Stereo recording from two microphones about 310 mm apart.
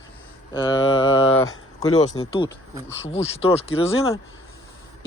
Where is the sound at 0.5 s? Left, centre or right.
Centre.